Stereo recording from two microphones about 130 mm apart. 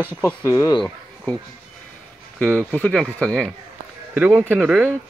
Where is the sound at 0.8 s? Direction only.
5° left (ahead or behind).